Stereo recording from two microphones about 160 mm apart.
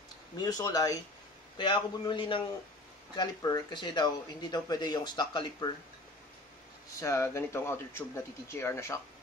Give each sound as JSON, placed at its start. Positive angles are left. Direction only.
{"t": 0.4, "sound": "a man's voice", "side_deg": 20}
{"t": 7.0, "sound": "speech", "side_deg": 20}